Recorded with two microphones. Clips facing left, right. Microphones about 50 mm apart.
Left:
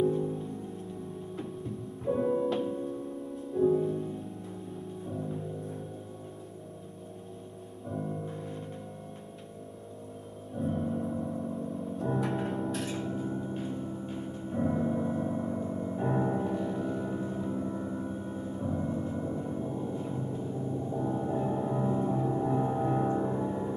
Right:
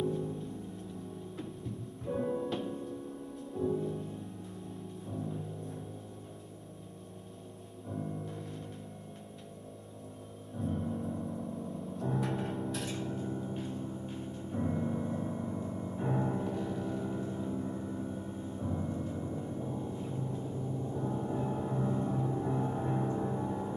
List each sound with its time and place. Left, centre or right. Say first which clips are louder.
0.0 s music: left 6 dB; centre
2.0 s music: left 6 dB; centre
2.5 s music: left 5 dB; centre
7.9 s music: left 3 dB; centre
10.7 s music: left 4 dB; centre
12.8 s gong: left 3 dB; centre
16.3 s music: left 4 dB; centre
17.7 s gong: left 3 dB; left
23.0 s music: left 4 dB; centre